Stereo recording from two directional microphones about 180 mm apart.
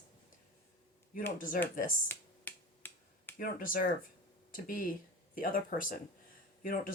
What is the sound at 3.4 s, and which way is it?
Speech, 50° left (ahead or behind).